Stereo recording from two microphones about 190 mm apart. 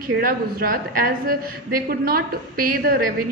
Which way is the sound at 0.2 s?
50° right (ahead or behind).